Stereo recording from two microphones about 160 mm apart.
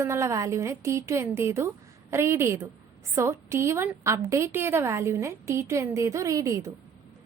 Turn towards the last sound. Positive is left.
turn(degrees=-20)  # may be behind; listen again after turning